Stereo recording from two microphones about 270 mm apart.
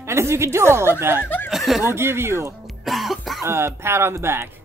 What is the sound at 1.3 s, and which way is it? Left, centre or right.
Music, centre.